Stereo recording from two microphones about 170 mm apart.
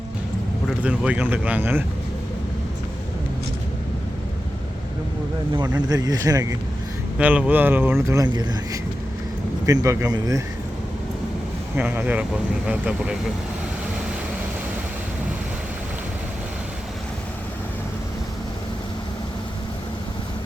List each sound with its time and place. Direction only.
0.8 s speech: 10° right (ahead or behind)
5.9 s speech: 20° right (ahead or behind)
7.2 s speech: 10° right (ahead or behind)
11.8 s speech: 10° right (ahead or behind)